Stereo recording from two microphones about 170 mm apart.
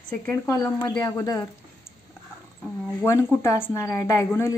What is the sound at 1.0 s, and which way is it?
Speech, 20° left (ahead or behind).